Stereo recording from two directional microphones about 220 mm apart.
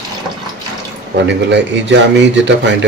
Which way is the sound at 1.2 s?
55° right (ahead or behind).